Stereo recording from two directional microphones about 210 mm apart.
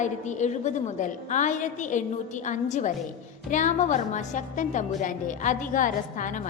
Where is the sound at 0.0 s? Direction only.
35° left (ahead or behind).